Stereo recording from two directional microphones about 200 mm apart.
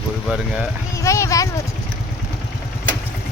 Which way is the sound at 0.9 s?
15° left (ahead or behind).